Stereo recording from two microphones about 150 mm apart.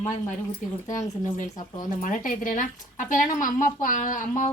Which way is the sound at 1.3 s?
55° left (ahead or behind).